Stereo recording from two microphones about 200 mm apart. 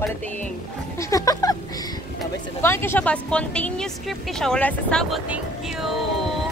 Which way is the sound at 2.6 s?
10° left (ahead or behind).